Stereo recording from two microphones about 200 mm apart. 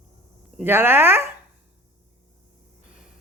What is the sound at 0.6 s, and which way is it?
Speech, 10° right (ahead or behind).